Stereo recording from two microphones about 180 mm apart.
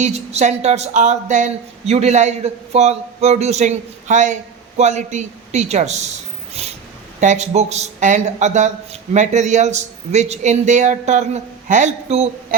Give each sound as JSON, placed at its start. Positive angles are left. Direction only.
{"t": 0.0, "sound": "speech", "side_deg": -35}
{"t": 6.5, "sound": "a sound", "side_deg": -35}
{"t": 7.2, "sound": "speech", "side_deg": -40}